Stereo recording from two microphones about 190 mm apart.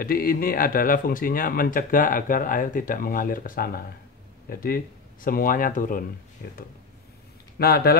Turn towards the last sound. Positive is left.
turn(degrees=55)  # may be behind; listen again after turning